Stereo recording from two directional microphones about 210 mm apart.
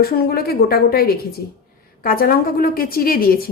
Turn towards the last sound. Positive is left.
turn(degrees=45)  # may be behind; listen again after turning